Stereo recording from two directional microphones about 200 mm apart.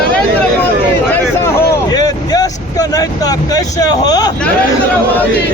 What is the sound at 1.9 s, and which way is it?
Vehicle, 20° left (ahead or behind).